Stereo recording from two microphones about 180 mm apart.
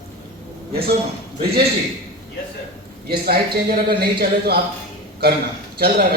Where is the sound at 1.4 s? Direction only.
60° right (ahead or behind).